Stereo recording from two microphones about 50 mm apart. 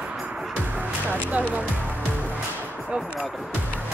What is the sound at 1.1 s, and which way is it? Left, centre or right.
Speech, right.